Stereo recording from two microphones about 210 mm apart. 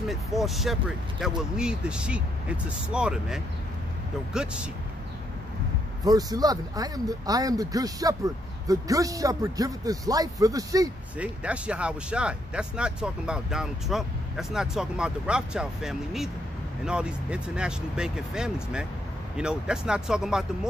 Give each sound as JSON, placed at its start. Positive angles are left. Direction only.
{"t": 0.1, "sound": "speech", "side_deg": 0}
{"t": 6.0, "sound": "speech", "side_deg": -20}
{"t": 11.4, "sound": "speech", "side_deg": -5}